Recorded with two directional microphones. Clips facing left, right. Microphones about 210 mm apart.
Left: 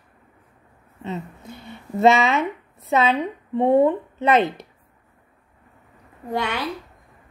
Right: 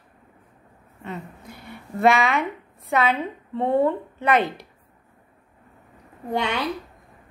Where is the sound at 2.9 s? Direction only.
20° left (ahead or behind).